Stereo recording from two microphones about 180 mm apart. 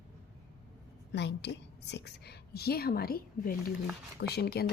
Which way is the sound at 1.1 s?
75° left (ahead or behind).